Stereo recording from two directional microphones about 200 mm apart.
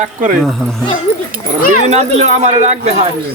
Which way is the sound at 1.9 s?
35° right (ahead or behind).